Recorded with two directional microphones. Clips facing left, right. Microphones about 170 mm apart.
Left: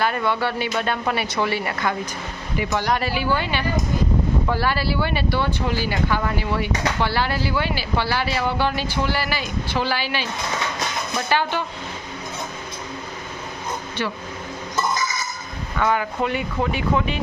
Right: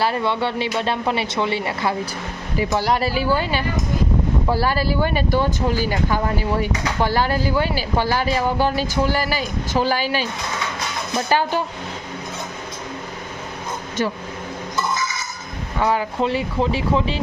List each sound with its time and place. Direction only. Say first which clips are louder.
0.0 s speech: right 1 dB; 30° right (ahead or behind)
11.3 s speech: right 3 dB; 40° right (ahead or behind)
14.0 s speech: right 5 dB; 40° right (ahead or behind)
15.8 s speech: right 2 dB; 30° right (ahead or behind)